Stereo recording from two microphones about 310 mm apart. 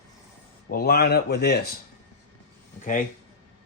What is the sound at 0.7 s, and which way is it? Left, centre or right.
Speech, left.